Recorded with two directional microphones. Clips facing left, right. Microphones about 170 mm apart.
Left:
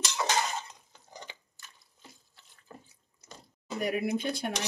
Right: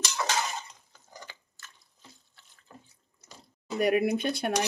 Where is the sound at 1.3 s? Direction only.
20° left (ahead or behind).